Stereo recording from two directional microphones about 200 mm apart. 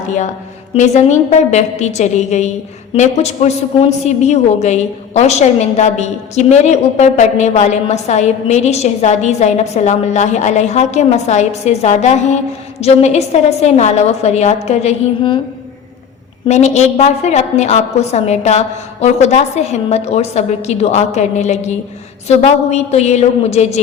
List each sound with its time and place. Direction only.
0.7 s a woman's voice: 35° left (ahead or behind)
16.5 s a woman's voice: 35° left (ahead or behind)